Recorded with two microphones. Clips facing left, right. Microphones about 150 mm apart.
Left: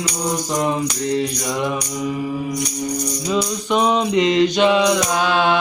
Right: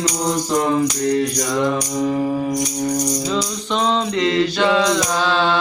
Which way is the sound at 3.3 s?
10° left (ahead or behind).